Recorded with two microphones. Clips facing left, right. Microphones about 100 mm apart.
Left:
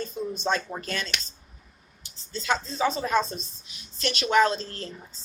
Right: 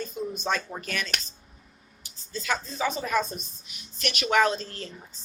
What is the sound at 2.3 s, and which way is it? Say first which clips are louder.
A woman's voice: left 2 dB; 25° left (ahead or behind).